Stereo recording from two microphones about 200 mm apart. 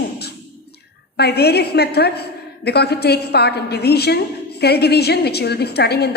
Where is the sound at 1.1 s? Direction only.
55° left (ahead or behind).